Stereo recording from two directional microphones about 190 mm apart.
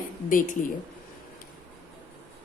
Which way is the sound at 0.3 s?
45° left (ahead or behind).